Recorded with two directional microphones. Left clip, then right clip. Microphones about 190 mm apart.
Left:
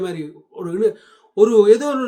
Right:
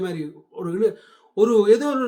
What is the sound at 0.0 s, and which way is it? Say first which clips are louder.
A man's voice: left 2 dB; 15° left (ahead or behind).